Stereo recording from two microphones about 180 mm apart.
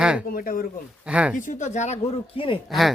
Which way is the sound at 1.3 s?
45° left (ahead or behind).